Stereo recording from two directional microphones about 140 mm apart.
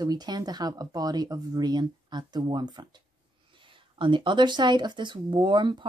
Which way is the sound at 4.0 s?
35° right (ahead or behind).